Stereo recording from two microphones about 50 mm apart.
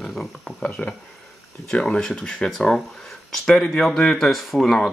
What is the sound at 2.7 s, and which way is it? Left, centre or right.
Speech, centre.